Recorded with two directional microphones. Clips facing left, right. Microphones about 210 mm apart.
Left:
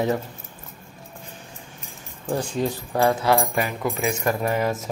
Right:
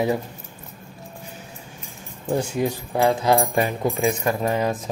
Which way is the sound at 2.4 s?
10° right (ahead or behind).